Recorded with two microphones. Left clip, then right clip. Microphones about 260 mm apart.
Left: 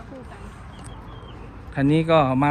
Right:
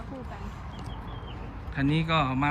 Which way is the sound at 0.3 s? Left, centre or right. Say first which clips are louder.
Even; right.